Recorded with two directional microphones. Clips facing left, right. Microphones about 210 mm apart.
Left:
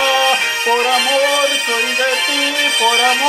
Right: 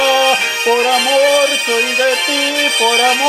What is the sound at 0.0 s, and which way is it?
Music, 35° right (ahead or behind).